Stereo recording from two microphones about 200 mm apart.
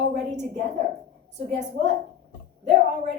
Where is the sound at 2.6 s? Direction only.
35° right (ahead or behind).